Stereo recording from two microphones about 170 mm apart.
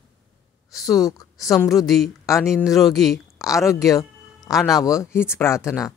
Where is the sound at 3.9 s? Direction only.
20° left (ahead or behind).